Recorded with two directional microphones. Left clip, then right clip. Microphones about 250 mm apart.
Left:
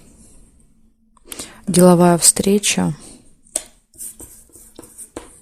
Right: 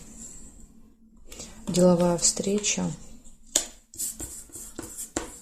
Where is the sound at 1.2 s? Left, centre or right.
Left.